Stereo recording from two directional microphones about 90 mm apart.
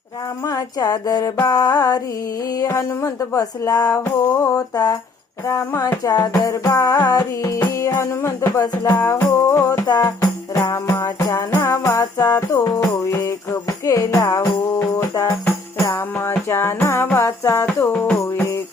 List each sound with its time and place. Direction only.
0.4 s a sound: 40° left (ahead or behind)
2.5 s music: 40° left (ahead or behind)
4.0 s music: 20° left (ahead or behind)
4.5 s a sound: 40° left (ahead or behind)
5.5 s music: 35° left (ahead or behind)
9.8 s music: 45° left (ahead or behind)
17.7 s music: 20° left (ahead or behind)